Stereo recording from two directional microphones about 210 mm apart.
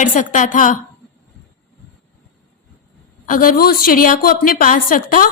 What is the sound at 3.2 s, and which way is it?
A woman's voice, 40° left (ahead or behind).